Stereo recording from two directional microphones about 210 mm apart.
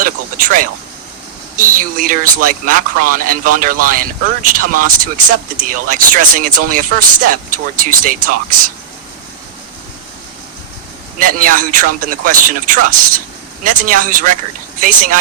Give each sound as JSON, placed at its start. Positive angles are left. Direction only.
{"t": 0.0, "sound": "a man's voice", "side_deg": -40}
{"t": 11.2, "sound": "a man's voice", "side_deg": -40}